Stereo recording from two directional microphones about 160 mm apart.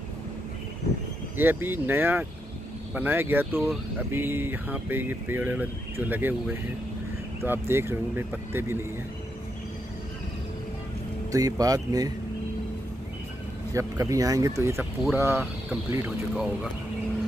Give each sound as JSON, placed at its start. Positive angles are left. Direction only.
{"t": 1.3, "sound": "speech", "side_deg": -10}
{"t": 11.3, "sound": "speech", "side_deg": -20}
{"t": 13.7, "sound": "speech", "side_deg": -20}